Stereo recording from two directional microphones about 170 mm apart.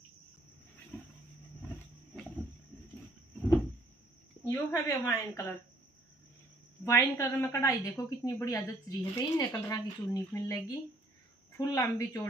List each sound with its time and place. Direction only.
0.9 s a sound: 10° left (ahead or behind)
4.5 s a woman's voice: 15° left (ahead or behind)
6.8 s a woman's voice: 10° left (ahead or behind)